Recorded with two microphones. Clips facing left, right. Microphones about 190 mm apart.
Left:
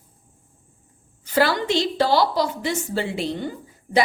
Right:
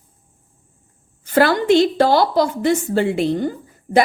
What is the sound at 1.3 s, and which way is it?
A woman's voice, 50° right (ahead or behind).